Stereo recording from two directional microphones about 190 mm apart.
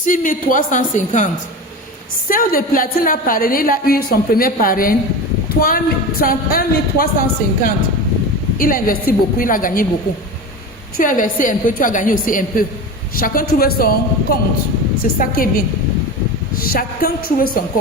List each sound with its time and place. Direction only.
0.0 s a woman's voice: 45° left (ahead or behind)
2.3 s a woman's voice: 50° left (ahead or behind)
10.9 s a woman's voice: 45° left (ahead or behind)